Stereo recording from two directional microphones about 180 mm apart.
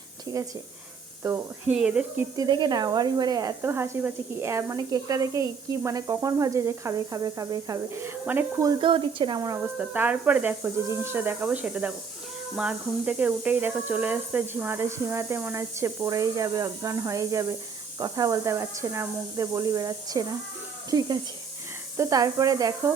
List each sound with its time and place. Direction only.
1.2 s speech: 10° right (ahead or behind)
2.3 s speech: 20° right (ahead or behind)
9.7 s speech: 10° right (ahead or behind)